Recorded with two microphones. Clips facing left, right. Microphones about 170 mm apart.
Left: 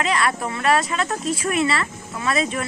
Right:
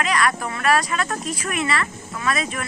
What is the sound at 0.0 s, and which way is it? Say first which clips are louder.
Speech: even; 25° left (ahead or behind).